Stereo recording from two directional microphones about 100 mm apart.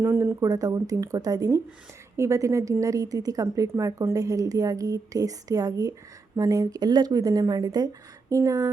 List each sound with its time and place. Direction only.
0.0 s a woman's voice: 25° right (ahead or behind)